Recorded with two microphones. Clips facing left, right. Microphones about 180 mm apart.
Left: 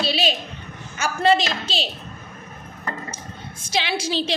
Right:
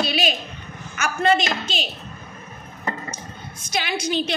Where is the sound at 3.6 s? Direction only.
25° left (ahead or behind).